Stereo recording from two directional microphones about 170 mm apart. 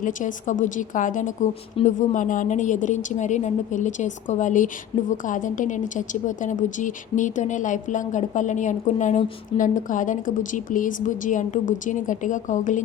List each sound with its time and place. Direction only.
0.0 s a woman's voice: 50° left (ahead or behind)